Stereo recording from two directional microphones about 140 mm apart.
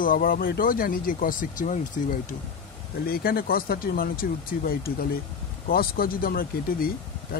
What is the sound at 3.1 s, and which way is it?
Speech, 90° left.